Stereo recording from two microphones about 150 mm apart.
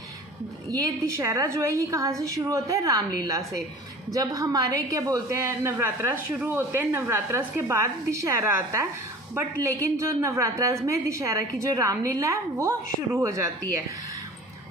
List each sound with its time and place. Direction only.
0.7 s a woman's voice: 25° right (ahead or behind)